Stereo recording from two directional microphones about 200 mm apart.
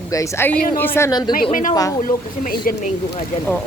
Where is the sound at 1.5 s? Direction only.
40° left (ahead or behind).